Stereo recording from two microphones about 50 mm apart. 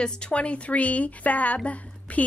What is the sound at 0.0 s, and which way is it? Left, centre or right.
Speech, left.